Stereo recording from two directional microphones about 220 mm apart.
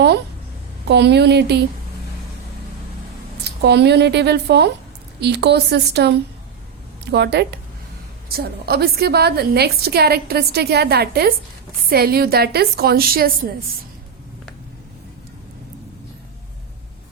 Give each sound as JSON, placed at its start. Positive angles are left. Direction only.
{"t": 0.9, "sound": "a woman's voice", "side_deg": -50}
{"t": 3.6, "sound": "a woman's voice", "side_deg": -50}